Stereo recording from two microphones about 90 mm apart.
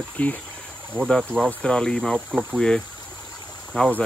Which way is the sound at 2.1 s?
10° right (ahead or behind).